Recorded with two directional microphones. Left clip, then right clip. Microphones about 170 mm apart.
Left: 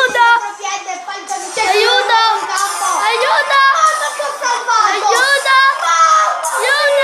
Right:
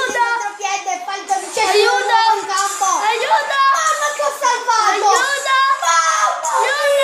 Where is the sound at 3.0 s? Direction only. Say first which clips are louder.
Left 5 dB; 45° left (ahead or behind).